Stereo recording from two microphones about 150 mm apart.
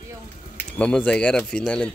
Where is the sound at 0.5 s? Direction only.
10° left (ahead or behind).